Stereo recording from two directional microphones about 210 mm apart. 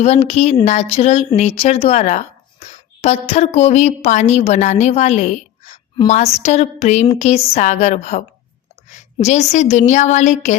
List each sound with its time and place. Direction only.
0.0 s a woman's voice: 30° left (ahead or behind)